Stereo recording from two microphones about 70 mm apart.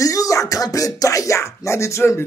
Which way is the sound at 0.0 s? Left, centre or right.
Left.